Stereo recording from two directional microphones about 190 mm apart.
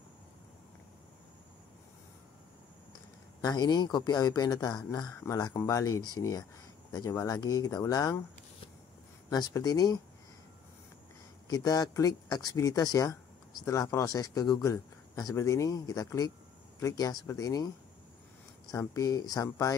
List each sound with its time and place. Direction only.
3.4 s a man's voice: 20° left (ahead or behind)
9.3 s speech: 20° left (ahead or behind)
11.4 s a man's voice: 20° left (ahead or behind)
18.7 s speech: 20° left (ahead or behind)